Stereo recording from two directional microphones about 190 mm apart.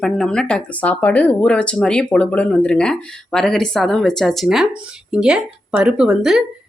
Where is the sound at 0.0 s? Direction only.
5° left (ahead or behind).